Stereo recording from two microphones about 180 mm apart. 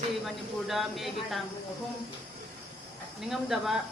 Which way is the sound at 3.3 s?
Centre (ahead or behind).